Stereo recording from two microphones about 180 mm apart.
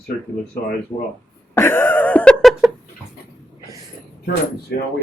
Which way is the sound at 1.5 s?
15° left (ahead or behind).